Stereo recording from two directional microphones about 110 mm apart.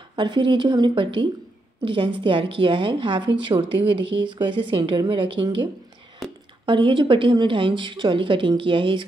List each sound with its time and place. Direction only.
0.1 s a woman's voice: 45° right (ahead or behind)
6.2 s whispering: centre (ahead or behind)
6.6 s a woman's voice: 50° right (ahead or behind)